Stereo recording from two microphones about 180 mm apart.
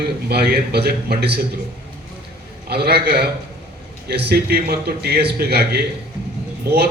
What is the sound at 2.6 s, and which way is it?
A man's voice, 65° right (ahead or behind).